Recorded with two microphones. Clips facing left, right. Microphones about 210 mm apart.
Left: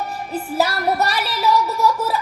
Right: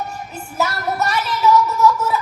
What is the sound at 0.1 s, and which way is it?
Music, 35° left (ahead or behind).